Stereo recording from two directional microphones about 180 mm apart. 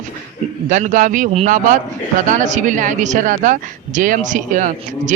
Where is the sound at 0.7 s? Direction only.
45° right (ahead or behind).